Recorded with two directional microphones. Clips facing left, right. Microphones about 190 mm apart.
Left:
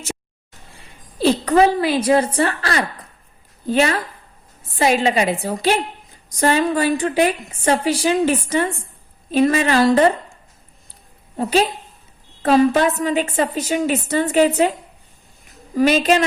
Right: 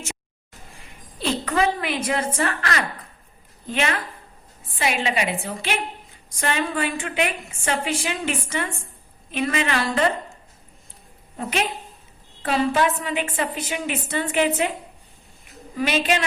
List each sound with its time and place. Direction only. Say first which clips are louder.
1.2 s a woman's voice: left 8 dB; 35° left (ahead or behind)
11.3 s a woman's voice: left 8 dB; 30° left (ahead or behind)